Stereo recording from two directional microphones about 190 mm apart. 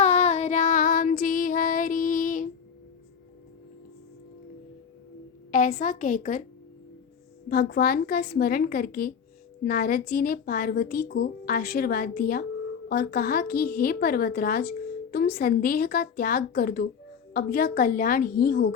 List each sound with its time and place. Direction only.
0.0 s female singing: 35° left (ahead or behind)
5.5 s a woman's voice: 45° left (ahead or behind)
7.4 s a woman's voice: 50° left (ahead or behind)